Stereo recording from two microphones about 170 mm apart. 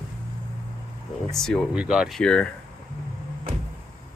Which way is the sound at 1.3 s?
Centre (ahead or behind).